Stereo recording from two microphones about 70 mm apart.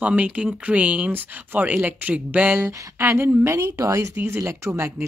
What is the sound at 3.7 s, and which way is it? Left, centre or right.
Speech, right.